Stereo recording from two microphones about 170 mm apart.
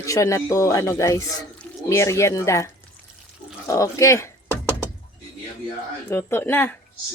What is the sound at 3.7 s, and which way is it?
Speech, 20° left (ahead or behind).